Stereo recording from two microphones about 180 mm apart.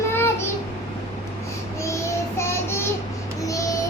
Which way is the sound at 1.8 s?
15° left (ahead or behind).